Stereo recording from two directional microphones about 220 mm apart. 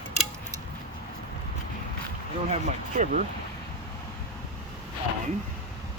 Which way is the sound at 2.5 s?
35° right (ahead or behind).